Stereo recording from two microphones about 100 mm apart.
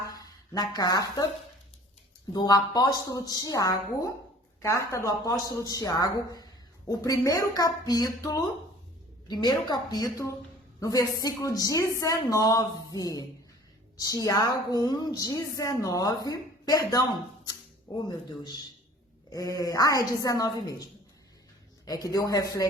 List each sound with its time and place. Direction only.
0.1 s speech: 40° left (ahead or behind)
2.3 s a woman's voice: 40° left (ahead or behind)
19.3 s speech: 35° left (ahead or behind)
21.8 s speech: 40° left (ahead or behind)